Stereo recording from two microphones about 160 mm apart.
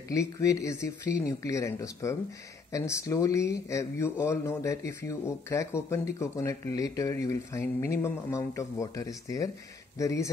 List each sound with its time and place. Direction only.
0.1 s speech: 20° left (ahead or behind)